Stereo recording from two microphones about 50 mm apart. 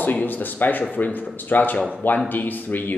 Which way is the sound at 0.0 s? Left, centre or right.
Left.